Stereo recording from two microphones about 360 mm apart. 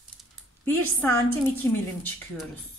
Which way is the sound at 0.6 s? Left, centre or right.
Centre.